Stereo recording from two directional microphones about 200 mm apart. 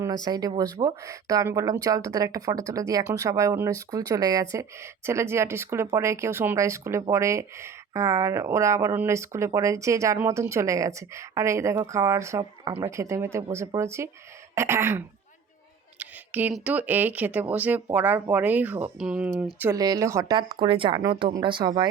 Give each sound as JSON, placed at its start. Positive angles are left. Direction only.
{"t": 0.0, "sound": "speech", "side_deg": -20}